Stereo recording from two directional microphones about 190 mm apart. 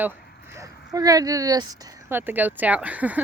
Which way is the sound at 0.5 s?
15° right (ahead or behind).